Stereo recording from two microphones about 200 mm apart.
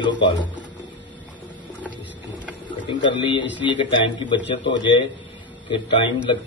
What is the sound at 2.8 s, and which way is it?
A man's voice, 25° left (ahead or behind).